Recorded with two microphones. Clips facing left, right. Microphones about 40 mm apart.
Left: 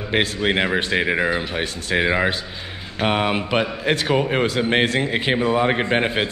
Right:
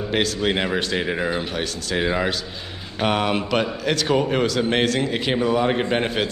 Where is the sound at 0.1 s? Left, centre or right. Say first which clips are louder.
Left 2 dB; left.